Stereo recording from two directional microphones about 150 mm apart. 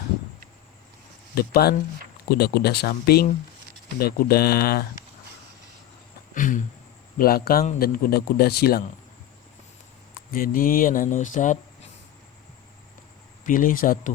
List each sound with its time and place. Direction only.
1.4 s speech: 90° left
6.3 s a sound: 60° left (ahead or behind)
7.2 s speech: 85° left
7.8 s speech: 75° left (ahead or behind)
10.3 s speech: 70° left (ahead or behind)
13.4 s speech: 65° left (ahead or behind)